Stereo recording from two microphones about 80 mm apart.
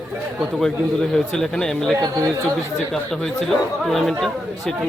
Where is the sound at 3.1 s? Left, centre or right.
Centre.